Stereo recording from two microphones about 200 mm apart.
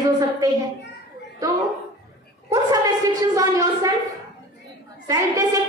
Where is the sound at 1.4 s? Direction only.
15° right (ahead or behind).